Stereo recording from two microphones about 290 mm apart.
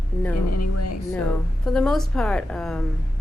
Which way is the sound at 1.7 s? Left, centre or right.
Centre.